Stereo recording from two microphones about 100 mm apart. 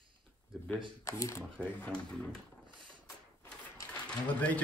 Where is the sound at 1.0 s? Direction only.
30° left (ahead or behind).